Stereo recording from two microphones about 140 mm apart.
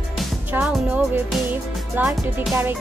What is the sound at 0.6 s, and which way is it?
Speech, 5° right (ahead or behind).